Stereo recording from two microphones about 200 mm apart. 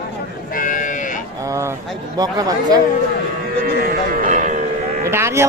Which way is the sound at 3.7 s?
50° right (ahead or behind).